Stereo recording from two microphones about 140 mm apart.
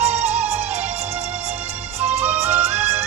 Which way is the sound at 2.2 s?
10° right (ahead or behind).